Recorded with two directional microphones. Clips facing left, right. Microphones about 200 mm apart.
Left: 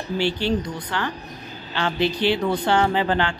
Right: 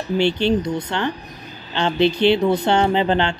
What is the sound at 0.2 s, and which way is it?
Speech, 20° right (ahead or behind).